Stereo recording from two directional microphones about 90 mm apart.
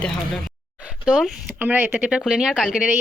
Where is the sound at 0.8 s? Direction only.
10° right (ahead or behind).